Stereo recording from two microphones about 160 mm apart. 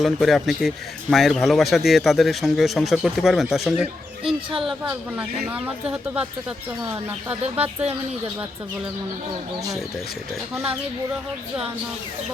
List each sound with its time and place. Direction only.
0.0 s a man's voice: centre (ahead or behind)
4.9 s speech: 10° right (ahead or behind)